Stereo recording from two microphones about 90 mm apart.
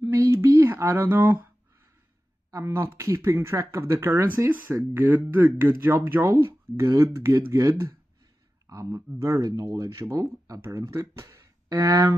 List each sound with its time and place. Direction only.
0.0 s a sound: 25° right (ahead or behind)
0.6 s speech: 30° right (ahead or behind)
2.5 s speech: 30° right (ahead or behind)
8.6 s speech: 35° right (ahead or behind)